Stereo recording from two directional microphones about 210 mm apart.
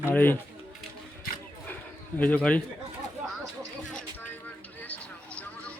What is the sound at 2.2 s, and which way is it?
Speech, 10° left (ahead or behind).